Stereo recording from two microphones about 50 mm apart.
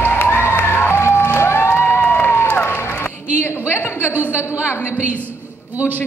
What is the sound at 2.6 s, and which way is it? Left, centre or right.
Music, left.